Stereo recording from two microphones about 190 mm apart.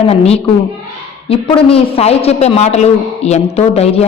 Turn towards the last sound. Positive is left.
turn(degrees=35)  # may be behind; listen again after turning